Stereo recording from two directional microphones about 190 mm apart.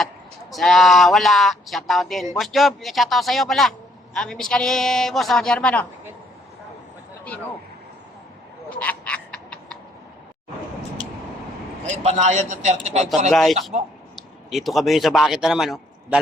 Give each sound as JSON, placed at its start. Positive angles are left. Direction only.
{"t": 0.5, "sound": "speech", "side_deg": 0}
{"t": 8.7, "sound": "frog", "side_deg": 10}
{"t": 11.9, "sound": "a man's voice", "side_deg": -35}
{"t": 13.3, "sound": "speech", "side_deg": 0}